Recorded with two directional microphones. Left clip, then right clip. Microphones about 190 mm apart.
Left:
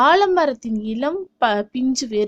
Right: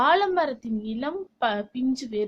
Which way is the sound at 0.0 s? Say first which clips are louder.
Left 6 dB; 40° left (ahead or behind).